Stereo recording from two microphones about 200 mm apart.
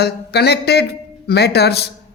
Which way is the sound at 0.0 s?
55° left (ahead or behind).